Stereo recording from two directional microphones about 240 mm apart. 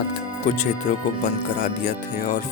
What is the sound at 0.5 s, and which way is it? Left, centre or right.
Speech, left.